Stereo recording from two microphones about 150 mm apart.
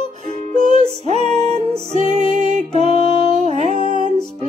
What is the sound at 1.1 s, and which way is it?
Music, 50° right (ahead or behind).